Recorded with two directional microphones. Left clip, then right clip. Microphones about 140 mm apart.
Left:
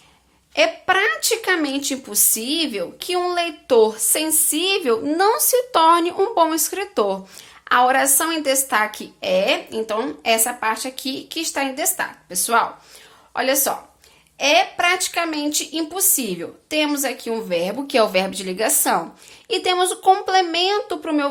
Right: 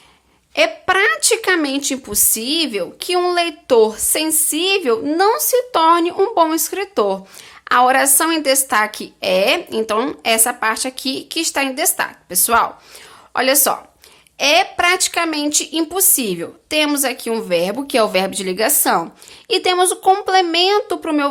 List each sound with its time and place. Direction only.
0.5 s a woman's voice: 25° right (ahead or behind)